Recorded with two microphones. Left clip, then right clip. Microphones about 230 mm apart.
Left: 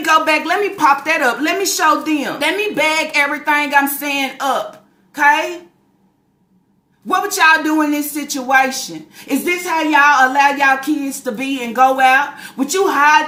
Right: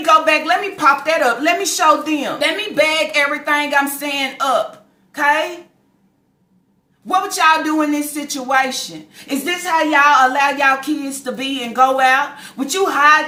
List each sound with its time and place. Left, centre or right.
0.0 s a woman's voice: centre
7.1 s a woman's voice: centre